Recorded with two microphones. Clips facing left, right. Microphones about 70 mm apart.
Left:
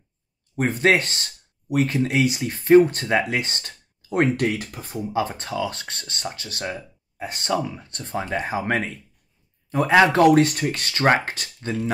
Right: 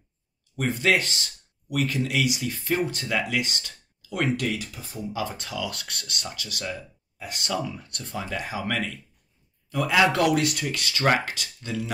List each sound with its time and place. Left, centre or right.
0.6 s speech: left